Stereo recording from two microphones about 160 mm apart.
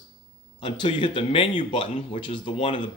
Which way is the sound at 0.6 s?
30° left (ahead or behind).